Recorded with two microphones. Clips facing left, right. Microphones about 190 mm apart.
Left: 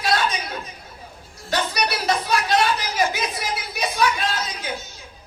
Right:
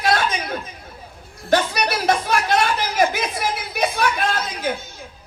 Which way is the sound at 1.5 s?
50° right (ahead or behind).